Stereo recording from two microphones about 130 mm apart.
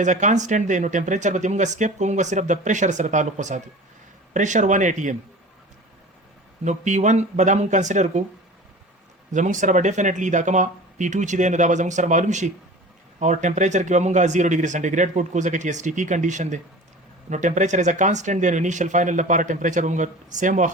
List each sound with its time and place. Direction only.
0.0 s speech: 70° right (ahead or behind)
6.7 s speech: 65° right (ahead or behind)
9.3 s speech: 70° right (ahead or behind)